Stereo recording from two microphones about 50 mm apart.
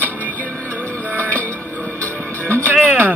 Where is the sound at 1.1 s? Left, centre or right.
Left.